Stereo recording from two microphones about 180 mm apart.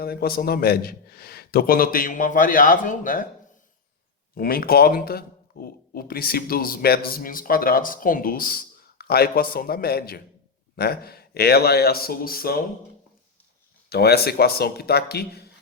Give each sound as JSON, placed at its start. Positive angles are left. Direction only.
{"t": 0.0, "sound": "speech", "side_deg": 60}
{"t": 4.4, "sound": "speech", "side_deg": 55}
{"t": 13.9, "sound": "speech", "side_deg": 60}